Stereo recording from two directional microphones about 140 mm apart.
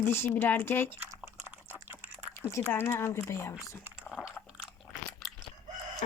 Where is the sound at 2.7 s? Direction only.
15° left (ahead or behind).